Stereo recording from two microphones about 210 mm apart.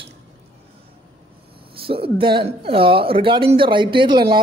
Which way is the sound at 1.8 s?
25° right (ahead or behind).